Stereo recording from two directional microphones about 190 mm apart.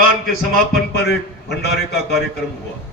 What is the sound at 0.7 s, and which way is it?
A man's voice, 60° left (ahead or behind).